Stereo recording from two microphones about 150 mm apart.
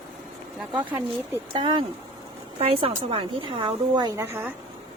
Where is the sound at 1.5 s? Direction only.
35° right (ahead or behind); by 4.5 s 20° right (ahead or behind).